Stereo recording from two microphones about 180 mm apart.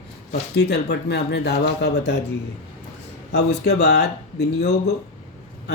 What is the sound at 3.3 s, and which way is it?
Speech, 65° left (ahead or behind).